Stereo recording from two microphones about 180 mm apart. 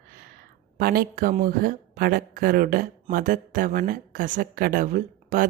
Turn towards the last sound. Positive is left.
turn(degrees=-50)  # may be behind; listen again after turning